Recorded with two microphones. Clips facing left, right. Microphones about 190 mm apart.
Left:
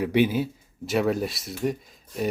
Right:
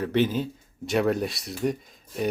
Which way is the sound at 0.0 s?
10° left (ahead or behind).